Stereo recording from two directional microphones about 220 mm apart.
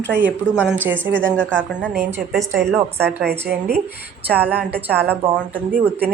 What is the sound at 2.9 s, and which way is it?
Speech, 45° right (ahead or behind).